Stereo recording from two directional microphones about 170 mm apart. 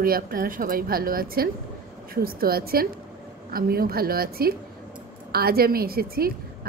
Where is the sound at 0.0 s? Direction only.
60° right (ahead or behind).